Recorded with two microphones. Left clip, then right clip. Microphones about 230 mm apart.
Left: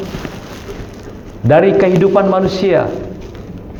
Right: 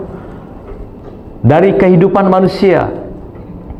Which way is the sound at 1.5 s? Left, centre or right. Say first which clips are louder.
Right 1 dB; right.